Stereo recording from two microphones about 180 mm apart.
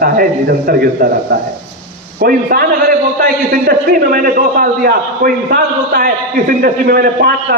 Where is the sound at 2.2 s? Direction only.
55° right (ahead or behind).